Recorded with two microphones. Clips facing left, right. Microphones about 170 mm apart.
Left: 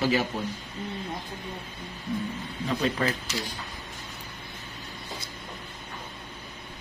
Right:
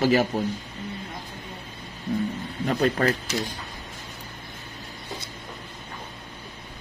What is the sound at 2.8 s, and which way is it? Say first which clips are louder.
Speech: right 6 dB; 55° right (ahead or behind).